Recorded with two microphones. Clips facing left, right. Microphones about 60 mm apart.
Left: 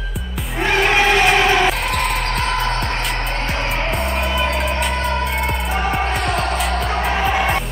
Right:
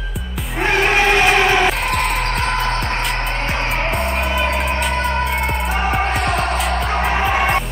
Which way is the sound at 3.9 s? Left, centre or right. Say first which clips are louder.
Right 1 dB; centre.